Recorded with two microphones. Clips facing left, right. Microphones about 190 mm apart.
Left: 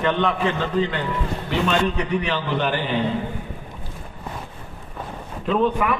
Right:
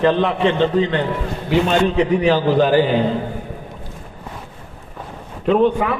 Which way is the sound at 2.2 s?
35° right (ahead or behind).